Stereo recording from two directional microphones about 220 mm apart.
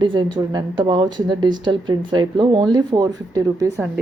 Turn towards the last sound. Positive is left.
turn(degrees=-15)  # may be behind; listen again after turning